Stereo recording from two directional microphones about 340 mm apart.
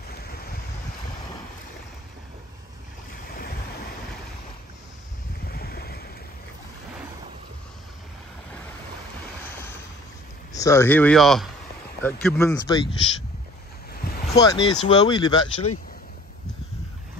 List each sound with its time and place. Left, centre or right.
5.4 s boat: left
10.5 s speech: centre
14.3 s speech: centre